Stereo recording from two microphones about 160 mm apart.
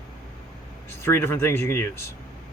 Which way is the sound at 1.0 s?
15° left (ahead or behind).